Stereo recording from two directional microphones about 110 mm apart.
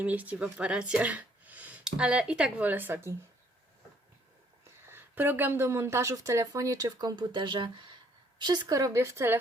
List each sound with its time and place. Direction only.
0.0 s speech: 15° right (ahead or behind)
4.9 s speech: 20° right (ahead or behind)